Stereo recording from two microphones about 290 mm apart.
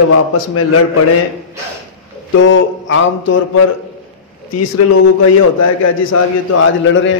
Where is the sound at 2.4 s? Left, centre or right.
Left.